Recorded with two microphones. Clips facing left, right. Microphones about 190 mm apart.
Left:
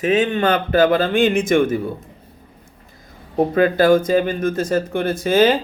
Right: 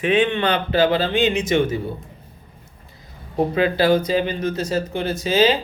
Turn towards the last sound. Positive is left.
turn(degrees=50)  # may be behind; listen again after turning